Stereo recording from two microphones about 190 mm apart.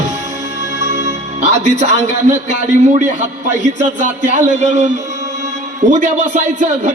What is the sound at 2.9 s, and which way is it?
A man's voice, 40° right (ahead or behind).